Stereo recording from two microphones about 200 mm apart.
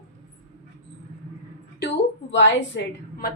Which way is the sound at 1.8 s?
55° left (ahead or behind).